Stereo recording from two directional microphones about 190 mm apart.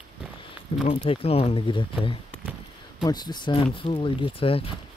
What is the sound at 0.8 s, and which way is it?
Speech, 30° left (ahead or behind).